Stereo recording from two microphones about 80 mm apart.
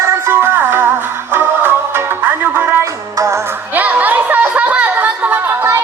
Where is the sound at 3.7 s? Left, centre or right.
Right.